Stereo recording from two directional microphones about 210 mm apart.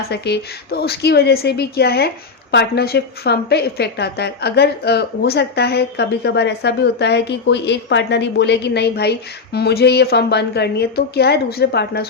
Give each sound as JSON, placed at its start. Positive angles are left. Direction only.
{"t": 0.1, "sound": "a woman's voice", "side_deg": 50}